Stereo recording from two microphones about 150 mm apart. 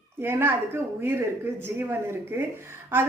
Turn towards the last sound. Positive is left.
turn(degrees=-15)  # may be behind; listen again after turning